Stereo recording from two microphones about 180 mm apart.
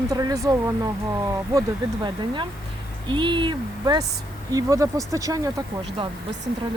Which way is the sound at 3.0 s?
25° right (ahead or behind).